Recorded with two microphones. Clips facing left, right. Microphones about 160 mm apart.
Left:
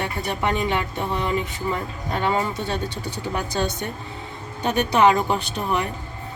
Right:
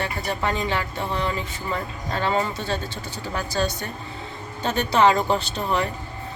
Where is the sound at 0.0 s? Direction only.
20° left (ahead or behind).